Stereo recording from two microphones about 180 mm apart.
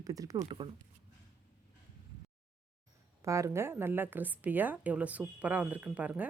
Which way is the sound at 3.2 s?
15° right (ahead or behind).